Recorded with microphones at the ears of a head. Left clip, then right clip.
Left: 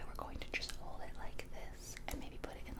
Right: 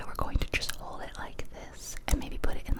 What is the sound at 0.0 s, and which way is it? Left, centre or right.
Whispering, right.